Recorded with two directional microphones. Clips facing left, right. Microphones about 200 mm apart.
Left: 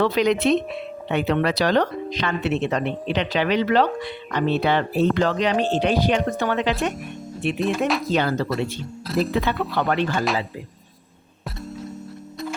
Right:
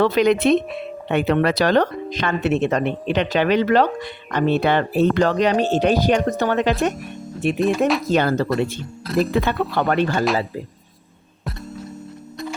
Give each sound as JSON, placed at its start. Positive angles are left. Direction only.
{"t": 0.0, "sound": "speech", "side_deg": -50}
{"t": 7.6, "sound": "speech", "side_deg": 0}
{"t": 8.0, "sound": "speech", "side_deg": -45}